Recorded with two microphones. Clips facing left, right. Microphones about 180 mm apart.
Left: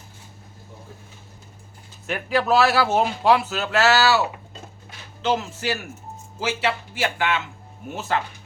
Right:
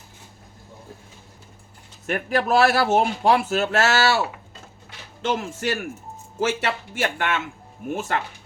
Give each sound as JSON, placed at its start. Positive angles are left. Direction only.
{"t": 2.0, "sound": "a man's voice", "side_deg": -50}
{"t": 5.4, "sound": "a man's voice", "side_deg": -50}